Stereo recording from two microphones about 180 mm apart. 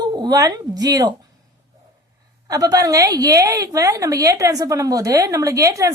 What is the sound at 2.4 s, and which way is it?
A woman's voice, 20° right (ahead or behind).